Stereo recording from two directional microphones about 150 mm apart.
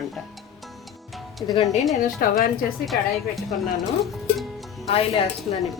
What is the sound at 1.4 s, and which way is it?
Speech, 20° left (ahead or behind).